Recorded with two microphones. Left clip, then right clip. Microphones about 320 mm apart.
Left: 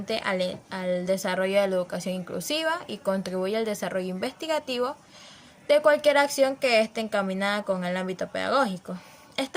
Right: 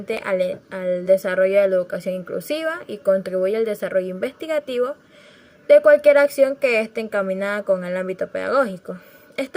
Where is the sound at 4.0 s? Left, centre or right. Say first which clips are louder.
Right 8 dB; left.